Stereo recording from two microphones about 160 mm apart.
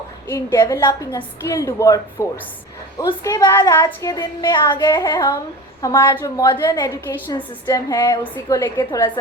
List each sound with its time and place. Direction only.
0.3 s a woman's voice: 20° left (ahead or behind)